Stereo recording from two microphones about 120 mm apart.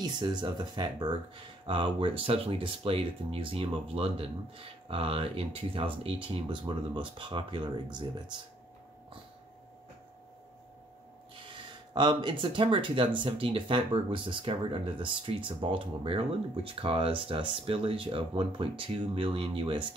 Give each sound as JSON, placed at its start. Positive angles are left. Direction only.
{"t": 0.0, "sound": "speech", "side_deg": -35}
{"t": 11.9, "sound": "speech", "side_deg": -40}